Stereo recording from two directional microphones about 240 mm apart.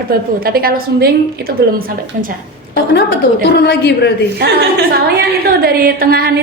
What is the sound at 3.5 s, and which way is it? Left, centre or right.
Speech, left.